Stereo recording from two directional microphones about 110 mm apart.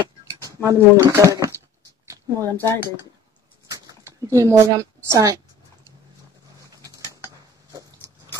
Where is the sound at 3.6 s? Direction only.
35° right (ahead or behind).